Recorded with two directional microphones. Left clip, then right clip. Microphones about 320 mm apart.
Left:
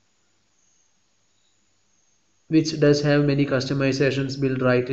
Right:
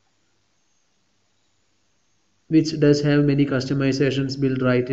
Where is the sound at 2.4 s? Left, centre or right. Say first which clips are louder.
Right 1 dB; centre.